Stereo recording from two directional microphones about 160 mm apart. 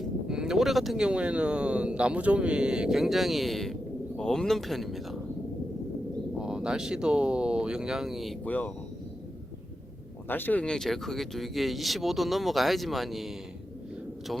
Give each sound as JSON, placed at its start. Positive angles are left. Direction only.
{"t": 0.3, "sound": "speech", "side_deg": -5}
{"t": 6.4, "sound": "speech", "side_deg": -5}
{"t": 8.4, "sound": "speech", "side_deg": 10}
{"t": 10.2, "sound": "speech", "side_deg": 10}